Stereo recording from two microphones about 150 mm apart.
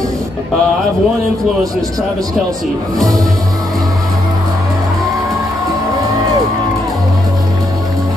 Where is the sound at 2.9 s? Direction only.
25° right (ahead or behind).